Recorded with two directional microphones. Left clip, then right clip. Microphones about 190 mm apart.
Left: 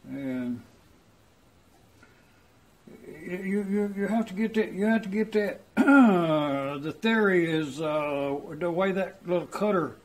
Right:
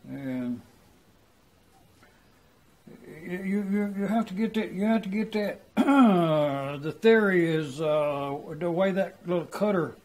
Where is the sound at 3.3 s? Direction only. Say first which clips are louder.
Left 1 dB; 25° right (ahead or behind).